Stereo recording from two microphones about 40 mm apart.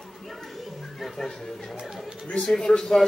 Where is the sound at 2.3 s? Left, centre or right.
Centre.